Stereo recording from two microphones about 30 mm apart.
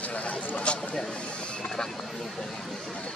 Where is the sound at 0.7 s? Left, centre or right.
Left.